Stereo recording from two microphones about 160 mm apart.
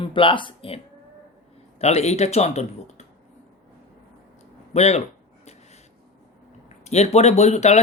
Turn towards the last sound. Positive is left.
turn(degrees=45)  # may be behind; listen again after turning